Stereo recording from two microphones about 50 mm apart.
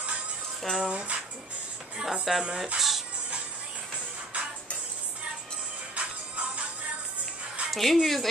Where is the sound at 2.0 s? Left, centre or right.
Centre.